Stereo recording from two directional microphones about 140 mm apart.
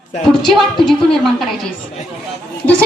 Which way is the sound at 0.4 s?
Centre (ahead or behind).